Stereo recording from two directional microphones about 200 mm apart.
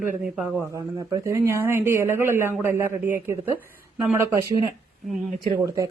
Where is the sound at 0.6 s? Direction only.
15° right (ahead or behind).